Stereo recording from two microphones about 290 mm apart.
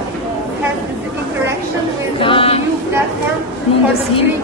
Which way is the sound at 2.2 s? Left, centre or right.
Centre.